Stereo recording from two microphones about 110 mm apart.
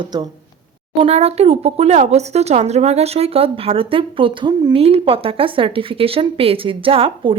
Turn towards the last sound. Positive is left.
turn(degrees=-55)  # may be behind; listen again after turning